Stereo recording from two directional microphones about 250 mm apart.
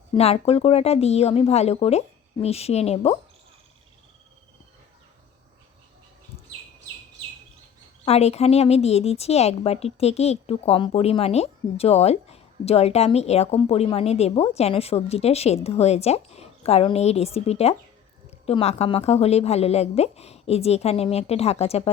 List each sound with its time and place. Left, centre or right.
0.2 s a woman's voice: left
8.0 s a woman's voice: left